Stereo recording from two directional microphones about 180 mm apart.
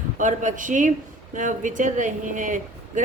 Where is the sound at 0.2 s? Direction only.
45° right (ahead or behind).